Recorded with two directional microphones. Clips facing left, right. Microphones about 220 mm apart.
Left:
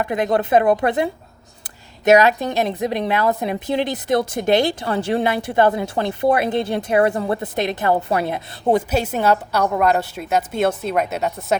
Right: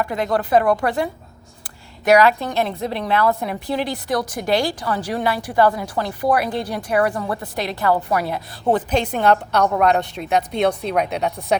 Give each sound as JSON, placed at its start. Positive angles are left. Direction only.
{"t": 0.0, "sound": "a woman's voice", "side_deg": 20}
{"t": 2.0, "sound": "a woman's voice", "side_deg": 20}